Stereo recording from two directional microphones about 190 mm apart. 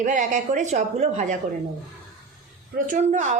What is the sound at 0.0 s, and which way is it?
A woman's voice, 40° right (ahead or behind).